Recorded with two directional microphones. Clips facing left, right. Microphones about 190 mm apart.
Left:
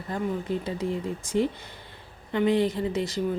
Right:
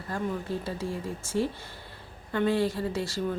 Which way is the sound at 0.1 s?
20° left (ahead or behind).